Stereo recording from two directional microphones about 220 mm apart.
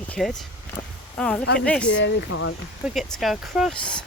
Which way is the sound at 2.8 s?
Centre (ahead or behind).